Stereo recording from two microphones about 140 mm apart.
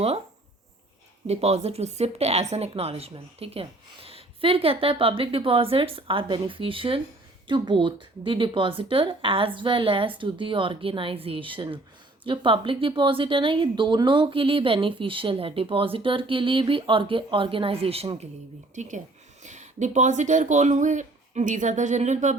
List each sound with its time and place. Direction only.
1.3 s speech: 50° right (ahead or behind)
18.7 s speech: 60° right (ahead or behind)